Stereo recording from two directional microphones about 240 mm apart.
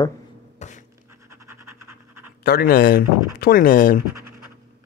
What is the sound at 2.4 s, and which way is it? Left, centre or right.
Speech, left.